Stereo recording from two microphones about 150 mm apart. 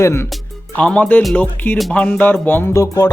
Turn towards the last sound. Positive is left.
turn(degrees=20)  # may be behind; listen again after turning